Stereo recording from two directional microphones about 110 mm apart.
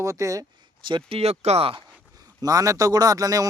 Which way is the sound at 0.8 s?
50° right (ahead or behind).